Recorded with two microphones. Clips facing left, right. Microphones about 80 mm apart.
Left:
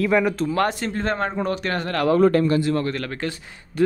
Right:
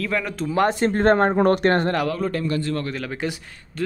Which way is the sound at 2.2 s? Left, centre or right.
Left.